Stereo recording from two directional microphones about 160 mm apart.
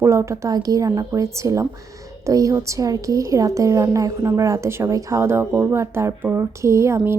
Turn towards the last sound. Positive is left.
turn(degrees=-15)  # may be behind; listen again after turning